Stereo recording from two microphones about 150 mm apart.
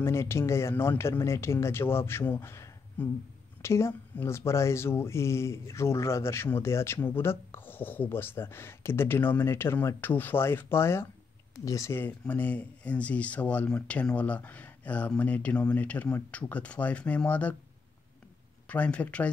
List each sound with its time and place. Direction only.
0.0 s speech: 15° left (ahead or behind)
18.7 s speech: 10° left (ahead or behind)